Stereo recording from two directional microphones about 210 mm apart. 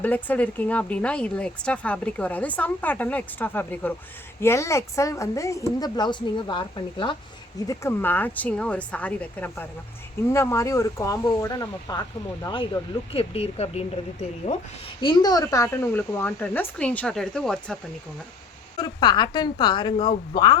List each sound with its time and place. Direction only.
0.0 s a woman's voice: 10° left (ahead or behind); by 14.6 s 30° left (ahead or behind)
15.0 s speech: 20° left (ahead or behind); by 17.7 s 5° left (ahead or behind)
18.8 s a woman's voice: 20° left (ahead or behind)